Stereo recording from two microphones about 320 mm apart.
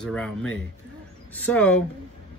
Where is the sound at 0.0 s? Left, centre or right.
Centre.